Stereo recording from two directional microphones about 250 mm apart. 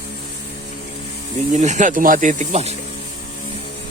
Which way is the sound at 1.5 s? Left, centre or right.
Right.